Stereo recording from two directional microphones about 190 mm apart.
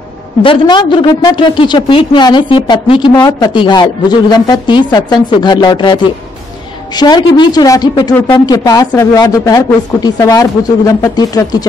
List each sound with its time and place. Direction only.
0.4 s a woman's voice: 25° left (ahead or behind)
7.0 s a woman's voice: 20° left (ahead or behind)